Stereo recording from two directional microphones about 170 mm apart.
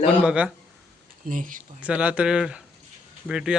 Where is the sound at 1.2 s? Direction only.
50° right (ahead or behind).